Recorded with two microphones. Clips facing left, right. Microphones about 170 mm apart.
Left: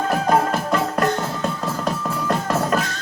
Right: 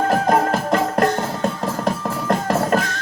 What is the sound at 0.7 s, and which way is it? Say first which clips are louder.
Music: right 3 dB; 50° right (ahead or behind).